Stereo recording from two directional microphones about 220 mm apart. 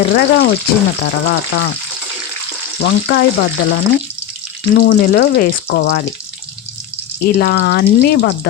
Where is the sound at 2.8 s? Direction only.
50° left (ahead or behind).